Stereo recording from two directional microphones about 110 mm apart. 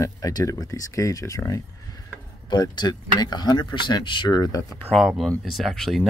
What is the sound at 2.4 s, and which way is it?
Speech, 40° left (ahead or behind).